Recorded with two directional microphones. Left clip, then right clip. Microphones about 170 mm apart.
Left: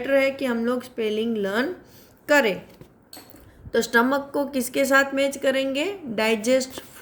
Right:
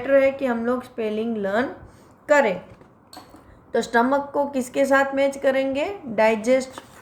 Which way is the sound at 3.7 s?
45° left (ahead or behind).